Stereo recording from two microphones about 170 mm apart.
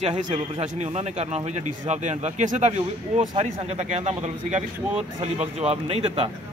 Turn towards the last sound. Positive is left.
turn(degrees=-35)  # may be behind; listen again after turning